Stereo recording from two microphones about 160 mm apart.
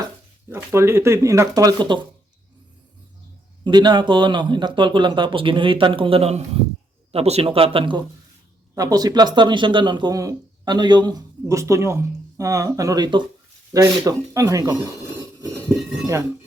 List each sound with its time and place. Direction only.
0.4 s speech: 15° right (ahead or behind)
3.6 s speech: 25° right (ahead or behind)